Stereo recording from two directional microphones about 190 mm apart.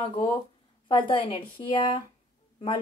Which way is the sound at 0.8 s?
25° left (ahead or behind).